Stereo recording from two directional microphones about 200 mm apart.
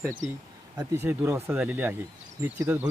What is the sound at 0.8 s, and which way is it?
Speech, 10° right (ahead or behind).